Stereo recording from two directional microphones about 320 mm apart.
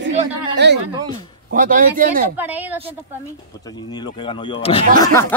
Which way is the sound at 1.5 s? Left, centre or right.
Right.